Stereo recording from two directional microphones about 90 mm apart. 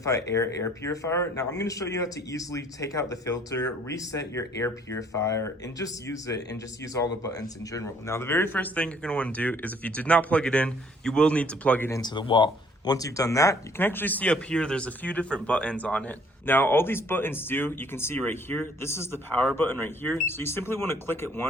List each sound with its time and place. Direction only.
0.0 s speech: 35° left (ahead or behind); by 11.9 s 15° left (ahead or behind)
12.0 s speech: 65° left (ahead or behind)
12.9 s speech: 40° left (ahead or behind)
13.7 s speech: 25° left (ahead or behind)